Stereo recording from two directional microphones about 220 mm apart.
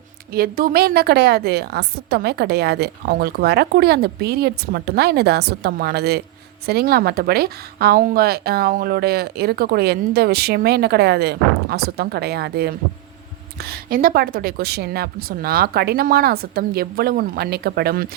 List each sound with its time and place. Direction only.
0.3 s speech: 40° right (ahead or behind)